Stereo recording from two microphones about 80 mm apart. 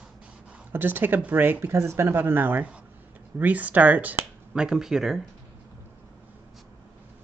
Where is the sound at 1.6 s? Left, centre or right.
Right.